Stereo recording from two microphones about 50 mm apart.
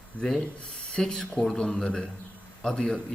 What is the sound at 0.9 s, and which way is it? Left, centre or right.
A man's voice, centre.